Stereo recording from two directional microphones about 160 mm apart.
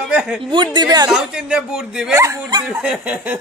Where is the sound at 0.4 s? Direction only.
30° right (ahead or behind).